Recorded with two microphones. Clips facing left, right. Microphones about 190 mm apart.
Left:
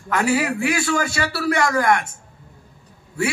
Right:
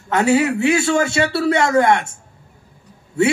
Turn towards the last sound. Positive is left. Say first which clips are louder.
# right 7 dB
turn(degrees=-25)  # may be behind; listen again after turning